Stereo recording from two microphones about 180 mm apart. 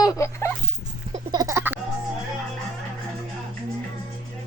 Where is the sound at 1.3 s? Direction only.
15° right (ahead or behind).